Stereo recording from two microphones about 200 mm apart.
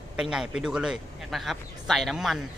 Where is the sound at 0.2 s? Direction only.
5° right (ahead or behind).